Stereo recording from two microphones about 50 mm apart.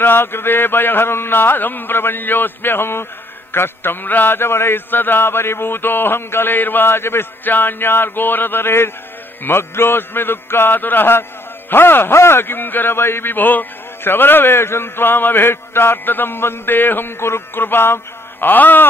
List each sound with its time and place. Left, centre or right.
0.0 s a man's voice: left
7.4 s a man's voice: left